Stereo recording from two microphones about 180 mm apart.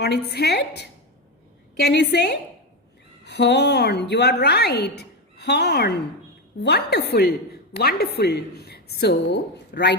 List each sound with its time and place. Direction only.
0.0 s a woman's voice: 65° left (ahead or behind)